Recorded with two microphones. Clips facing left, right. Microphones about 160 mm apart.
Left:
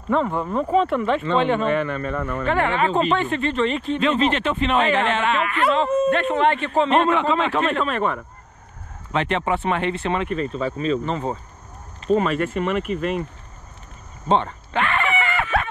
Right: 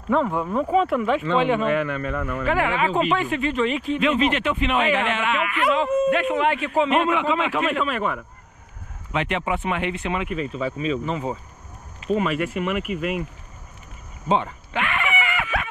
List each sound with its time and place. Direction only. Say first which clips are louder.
0.1 s speech: even; centre (ahead or behind)
4.0 s speech: left 1 dB; 30° left (ahead or behind)
6.0 s speech: left 2 dB; 5° right (ahead or behind)
7.1 s speech: left 2 dB; 35° left (ahead or behind)
10.2 s speech: left 2 dB; 5° right (ahead or behind)
12.1 s speech: left 3 dB; 40° left (ahead or behind)
12.8 s speech: left 2 dB; 10° right (ahead or behind)
14.7 s a sound: left 3 dB; 30° left (ahead or behind)